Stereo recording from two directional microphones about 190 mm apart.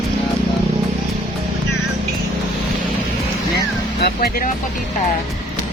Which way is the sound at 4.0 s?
55° left (ahead or behind).